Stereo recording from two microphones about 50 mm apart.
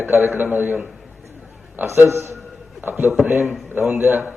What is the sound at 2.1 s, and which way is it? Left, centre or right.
Speech, right.